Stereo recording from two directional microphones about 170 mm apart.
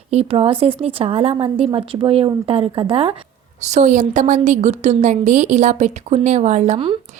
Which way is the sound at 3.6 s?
45° right (ahead or behind).